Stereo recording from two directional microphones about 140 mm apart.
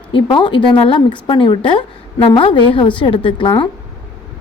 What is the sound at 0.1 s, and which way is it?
Speech, 35° left (ahead or behind).